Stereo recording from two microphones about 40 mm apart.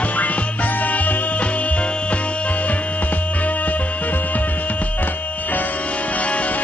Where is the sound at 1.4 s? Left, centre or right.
Left.